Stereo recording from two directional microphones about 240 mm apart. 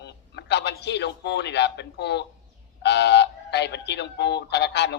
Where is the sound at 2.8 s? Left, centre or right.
Left.